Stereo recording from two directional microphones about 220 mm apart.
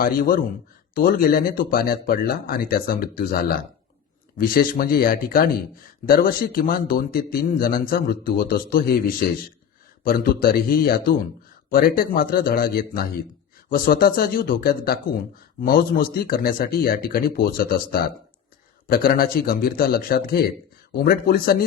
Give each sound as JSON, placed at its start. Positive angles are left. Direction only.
{"t": 0.0, "sound": "a man's voice", "side_deg": 40}